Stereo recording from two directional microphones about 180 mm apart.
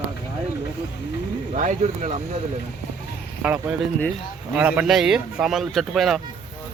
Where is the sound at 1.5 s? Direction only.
40° right (ahead or behind).